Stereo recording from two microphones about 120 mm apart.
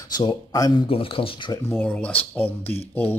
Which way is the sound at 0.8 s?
50° left (ahead or behind).